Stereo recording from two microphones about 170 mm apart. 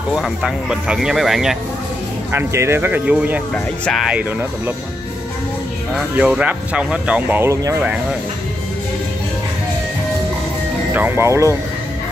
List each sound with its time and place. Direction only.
0.1 s speech: 5° right (ahead or behind)
2.3 s speech: 15° right (ahead or behind)
3.5 s speech: 5° left (ahead or behind)
5.9 s speech: 5° right (ahead or behind)
10.9 s speech: 15° right (ahead or behind)